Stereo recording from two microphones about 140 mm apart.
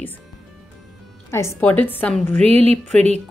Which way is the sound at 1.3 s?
20° left (ahead or behind).